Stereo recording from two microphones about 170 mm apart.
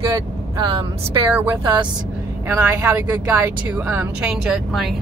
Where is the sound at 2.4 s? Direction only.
15° right (ahead or behind).